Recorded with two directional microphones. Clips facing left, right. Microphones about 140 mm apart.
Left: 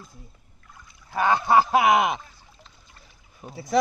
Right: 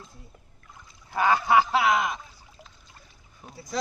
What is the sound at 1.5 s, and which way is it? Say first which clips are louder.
Speech: left 5 dB; 45° left (ahead or behind).